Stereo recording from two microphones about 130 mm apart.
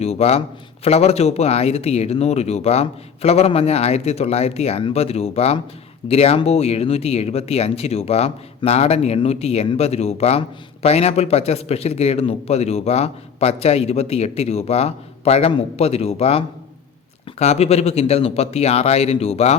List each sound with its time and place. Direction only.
0.0 s a man's voice: 55° left (ahead or behind)
17.4 s a man's voice: 55° left (ahead or behind)